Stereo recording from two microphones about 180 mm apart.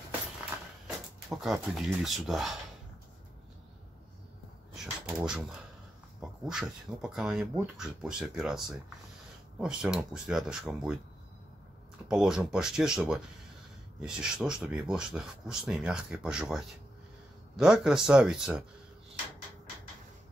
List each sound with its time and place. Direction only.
0.8 s speech: centre (ahead or behind)
4.7 s a sound: 5° right (ahead or behind)
6.4 s speech: centre (ahead or behind)
12.1 s speech: 5° right (ahead or behind)